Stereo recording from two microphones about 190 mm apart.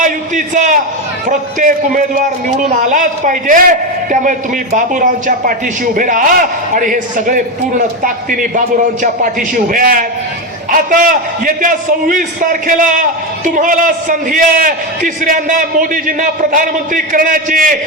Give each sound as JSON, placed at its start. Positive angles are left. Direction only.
{"t": 0.0, "sound": "a man's voice", "side_deg": -40}